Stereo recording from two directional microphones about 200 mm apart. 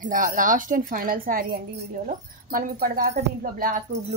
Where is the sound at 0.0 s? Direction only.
40° right (ahead or behind).